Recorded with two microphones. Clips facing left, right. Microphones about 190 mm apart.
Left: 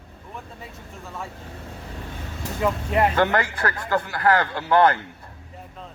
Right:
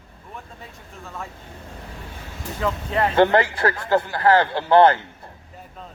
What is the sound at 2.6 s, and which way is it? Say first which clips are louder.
Speech: left 2 dB; 10° left (ahead or behind).